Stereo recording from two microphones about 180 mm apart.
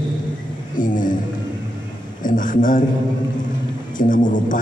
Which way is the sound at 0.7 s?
45° left (ahead or behind).